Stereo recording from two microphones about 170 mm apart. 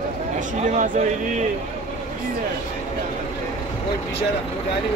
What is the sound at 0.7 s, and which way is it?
Speech, 50° right (ahead or behind).